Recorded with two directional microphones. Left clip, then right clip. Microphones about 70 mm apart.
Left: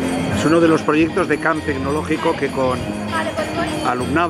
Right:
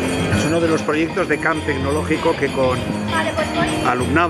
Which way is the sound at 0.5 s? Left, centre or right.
Left.